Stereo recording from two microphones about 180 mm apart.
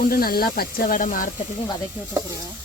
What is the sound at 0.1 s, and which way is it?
Speech, 55° left (ahead or behind).